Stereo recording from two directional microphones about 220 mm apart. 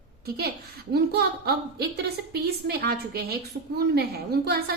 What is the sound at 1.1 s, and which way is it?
A woman's voice, 45° right (ahead or behind).